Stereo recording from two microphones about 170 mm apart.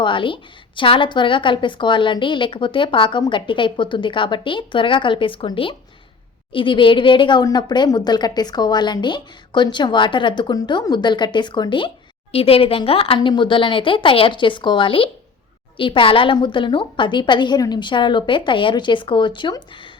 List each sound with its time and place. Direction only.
0.0 s speech: 30° left (ahead or behind)